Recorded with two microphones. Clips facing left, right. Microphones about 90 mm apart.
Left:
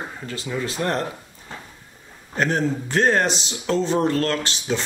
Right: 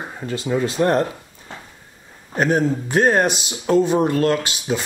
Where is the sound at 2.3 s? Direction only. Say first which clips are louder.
Right 4 dB; 10° right (ahead or behind).